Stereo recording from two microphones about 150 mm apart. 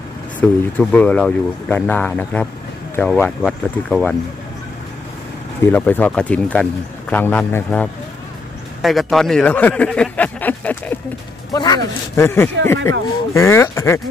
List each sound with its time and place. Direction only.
0.4 s a man's voice: 10° left (ahead or behind)
5.7 s a man's voice: 10° left (ahead or behind)
11.5 s speech: 30° left (ahead or behind)
12.2 s a man's voice: 15° left (ahead or behind)